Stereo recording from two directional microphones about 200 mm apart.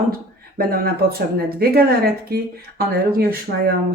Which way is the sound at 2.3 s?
50° right (ahead or behind).